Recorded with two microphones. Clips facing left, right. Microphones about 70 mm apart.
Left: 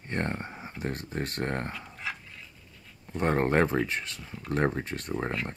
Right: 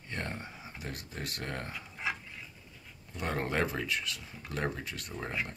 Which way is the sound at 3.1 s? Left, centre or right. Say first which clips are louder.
Left 8 dB; left.